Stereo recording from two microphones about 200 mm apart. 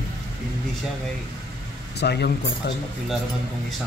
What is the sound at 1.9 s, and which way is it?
Speech, 55° left (ahead or behind).